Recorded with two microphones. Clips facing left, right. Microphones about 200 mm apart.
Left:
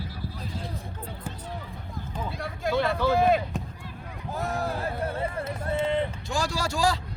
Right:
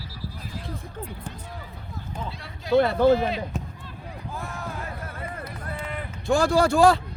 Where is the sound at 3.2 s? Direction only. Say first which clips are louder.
Left 5 dB; 50° left (ahead or behind).